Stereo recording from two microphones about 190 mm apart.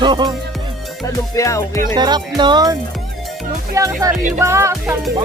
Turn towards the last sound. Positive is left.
turn(degrees=-15)  # may be behind; listen again after turning